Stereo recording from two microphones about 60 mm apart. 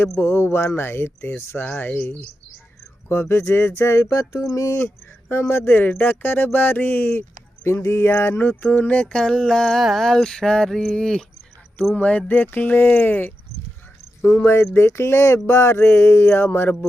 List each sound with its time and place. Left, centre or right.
0.2 s speech: left
1.6 s speech: left
3.1 s speech: left
5.4 s speech: left
8.6 s speech: left
9.1 s a sound: centre
11.9 s speech: left
14.4 s speech: left